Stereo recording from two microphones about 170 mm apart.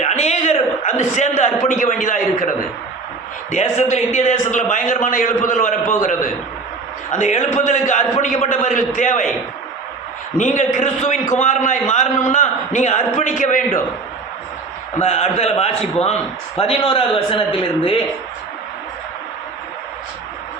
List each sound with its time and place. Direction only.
0.0 s a man's voice: 40° left (ahead or behind)
10.3 s a man's voice: 45° left (ahead or behind)
14.9 s a man's voice: 40° left (ahead or behind)